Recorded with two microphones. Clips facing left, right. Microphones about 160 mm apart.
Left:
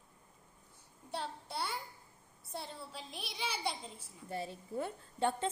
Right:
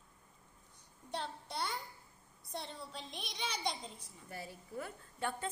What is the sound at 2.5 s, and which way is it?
A woman's voice, 5° left (ahead or behind).